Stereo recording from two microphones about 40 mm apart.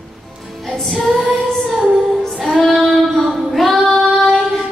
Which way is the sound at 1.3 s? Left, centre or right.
Right.